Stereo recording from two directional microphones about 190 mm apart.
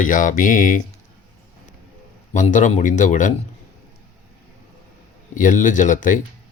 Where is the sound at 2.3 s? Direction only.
40° left (ahead or behind).